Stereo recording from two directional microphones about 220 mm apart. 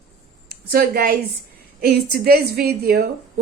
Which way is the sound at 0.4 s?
45° right (ahead or behind).